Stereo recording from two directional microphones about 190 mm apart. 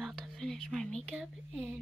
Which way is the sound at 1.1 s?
5° right (ahead or behind).